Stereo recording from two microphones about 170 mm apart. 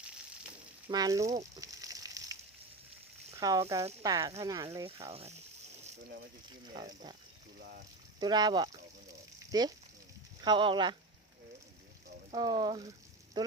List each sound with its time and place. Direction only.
0.9 s speech: 20° right (ahead or behind)
1.5 s a sound: 20° right (ahead or behind)
3.3 s speech: 20° right (ahead or behind)
5.0 s speech: 35° right (ahead or behind)
6.7 s speech: 25° right (ahead or behind)
8.2 s speech: 25° right (ahead or behind)
9.5 s frying: 25° right (ahead or behind)
10.4 s speech: 30° right (ahead or behind)
12.3 s speech: 25° right (ahead or behind)